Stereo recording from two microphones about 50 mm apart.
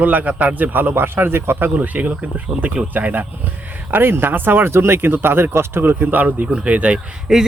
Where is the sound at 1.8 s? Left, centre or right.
Right.